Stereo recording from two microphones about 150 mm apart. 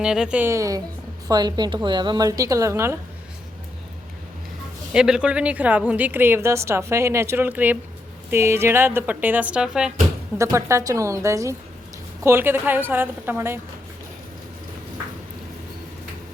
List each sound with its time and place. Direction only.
0.0 s a woman's voice: 5° right (ahead or behind)
4.9 s a woman's voice: 5° right (ahead or behind)
10.3 s a woman's voice: 20° right (ahead or behind)